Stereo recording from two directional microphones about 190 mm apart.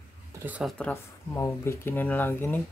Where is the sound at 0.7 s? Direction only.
10° left (ahead or behind).